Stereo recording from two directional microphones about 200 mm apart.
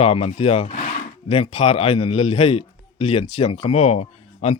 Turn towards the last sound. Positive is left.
turn(degrees=30)  # may be behind; listen again after turning